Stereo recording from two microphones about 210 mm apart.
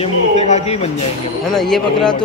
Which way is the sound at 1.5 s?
Centre (ahead or behind).